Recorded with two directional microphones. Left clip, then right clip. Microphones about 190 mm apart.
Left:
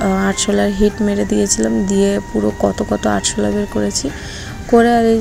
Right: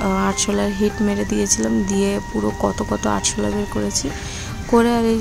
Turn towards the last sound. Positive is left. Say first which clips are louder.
# left 5 dB
turn(degrees=10)  # may be behind; listen again after turning